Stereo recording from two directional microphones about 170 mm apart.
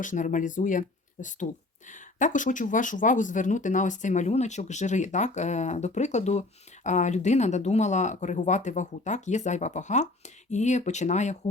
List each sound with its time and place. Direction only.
0.0 s speech: 50° left (ahead or behind)